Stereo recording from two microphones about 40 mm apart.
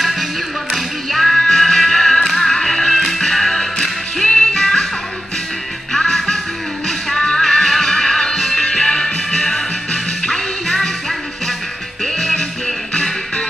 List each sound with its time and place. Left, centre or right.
0.0 s music: centre
5.9 s music: centre